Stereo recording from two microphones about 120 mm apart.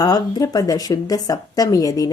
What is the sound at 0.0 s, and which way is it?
Speech, 30° left (ahead or behind).